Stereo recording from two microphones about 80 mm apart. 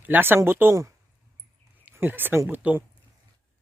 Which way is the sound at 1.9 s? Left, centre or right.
Right.